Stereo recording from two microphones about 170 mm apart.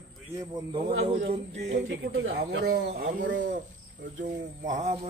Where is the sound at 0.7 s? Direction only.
35° right (ahead or behind).